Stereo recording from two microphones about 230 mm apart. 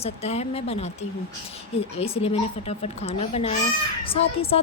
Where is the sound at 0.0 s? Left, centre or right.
Left.